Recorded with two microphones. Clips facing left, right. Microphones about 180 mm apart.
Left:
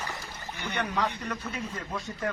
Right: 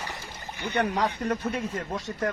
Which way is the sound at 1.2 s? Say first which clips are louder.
Right 7 dB; 50° right (ahead or behind).